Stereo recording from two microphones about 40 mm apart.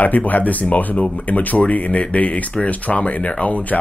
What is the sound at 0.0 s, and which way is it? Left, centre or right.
Speech, left.